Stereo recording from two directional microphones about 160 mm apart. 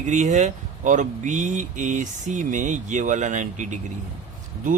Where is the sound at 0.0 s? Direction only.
50° right (ahead or behind).